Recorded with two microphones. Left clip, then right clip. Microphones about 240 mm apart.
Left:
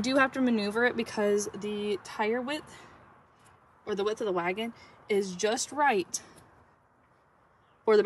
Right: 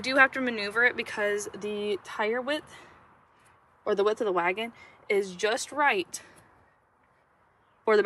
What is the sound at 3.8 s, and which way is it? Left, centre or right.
Speech, centre.